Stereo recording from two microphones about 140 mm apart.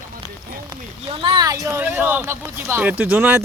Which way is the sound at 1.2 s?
30° right (ahead or behind).